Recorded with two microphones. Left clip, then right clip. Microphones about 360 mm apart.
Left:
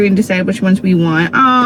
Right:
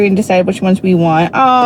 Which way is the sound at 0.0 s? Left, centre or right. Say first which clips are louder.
Right 3 dB; right.